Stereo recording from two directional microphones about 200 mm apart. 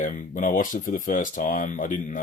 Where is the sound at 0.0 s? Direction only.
40° left (ahead or behind).